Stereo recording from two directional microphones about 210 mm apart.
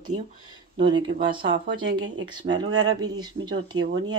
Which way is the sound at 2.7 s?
85° right.